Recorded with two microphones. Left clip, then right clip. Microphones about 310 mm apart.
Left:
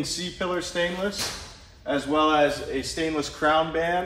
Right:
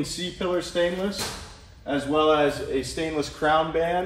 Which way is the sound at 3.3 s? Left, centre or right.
Centre.